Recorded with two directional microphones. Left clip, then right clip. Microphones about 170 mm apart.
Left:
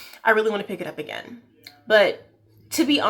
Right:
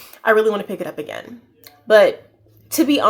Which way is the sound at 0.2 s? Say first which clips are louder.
Right 4 dB; 45° right (ahead or behind).